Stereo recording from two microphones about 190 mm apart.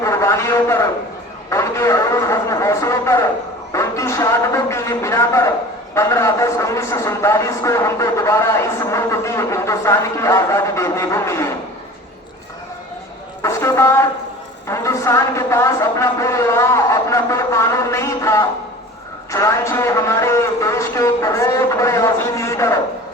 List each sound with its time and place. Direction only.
0.0 s a sound: 15° left (ahead or behind)
1.5 s speech: 15° left (ahead or behind)
13.4 s speech: 15° left (ahead or behind)